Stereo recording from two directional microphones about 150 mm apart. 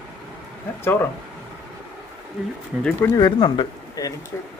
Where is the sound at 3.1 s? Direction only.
30° left (ahead or behind).